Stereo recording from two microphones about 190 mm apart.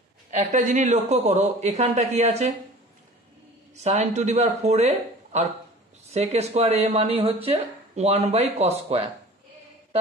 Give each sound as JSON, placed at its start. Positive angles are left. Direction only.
{"t": 0.3, "sound": "speech", "side_deg": -40}
{"t": 3.7, "sound": "speech", "side_deg": -35}